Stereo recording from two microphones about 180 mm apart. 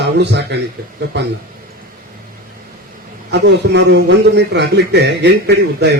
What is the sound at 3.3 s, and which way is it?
Speech, 70° right (ahead or behind).